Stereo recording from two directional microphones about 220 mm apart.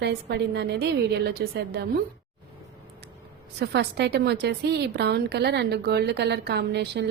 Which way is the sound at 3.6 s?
50° right (ahead or behind).